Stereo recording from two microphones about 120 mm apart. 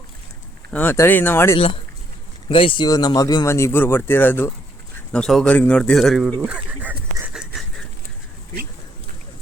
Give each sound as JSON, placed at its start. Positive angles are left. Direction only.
{"t": 0.7, "sound": "speech", "side_deg": 15}
{"t": 1.5, "sound": "speech", "side_deg": 50}
{"t": 2.8, "sound": "speech", "side_deg": 35}
{"t": 5.1, "sound": "speech", "side_deg": 5}